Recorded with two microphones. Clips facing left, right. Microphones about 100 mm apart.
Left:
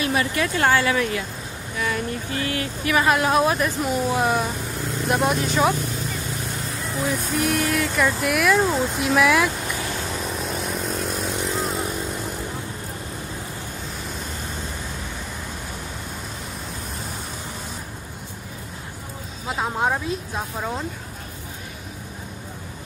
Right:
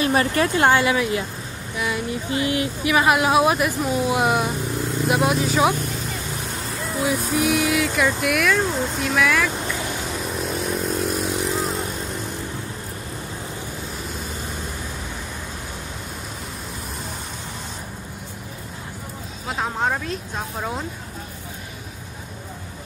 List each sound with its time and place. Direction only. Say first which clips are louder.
0.0 s a sound: right 3 dB; 35° right (ahead or behind)
0.6 s speech: right 1 dB; 20° right (ahead or behind); by 4.1 s centre (ahead or behind)
4.1 s speech: right 1 dB; 10° right (ahead or behind)
7.0 s speech: right 2 dB; 5° right (ahead or behind)
10.0 s vehicle: right 1 dB; centre (ahead or behind)
19.4 s a sound: left 1 dB; centre (ahead or behind)
20.5 s speech: right 1 dB; centre (ahead or behind)